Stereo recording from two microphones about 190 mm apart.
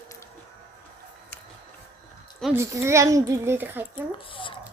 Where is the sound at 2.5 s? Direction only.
15° right (ahead or behind).